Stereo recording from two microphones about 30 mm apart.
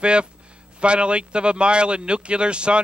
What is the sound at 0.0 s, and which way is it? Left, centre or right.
A man's voice, right.